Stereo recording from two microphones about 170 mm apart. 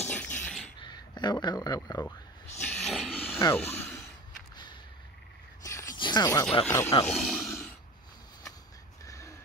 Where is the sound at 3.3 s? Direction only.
10° left (ahead or behind).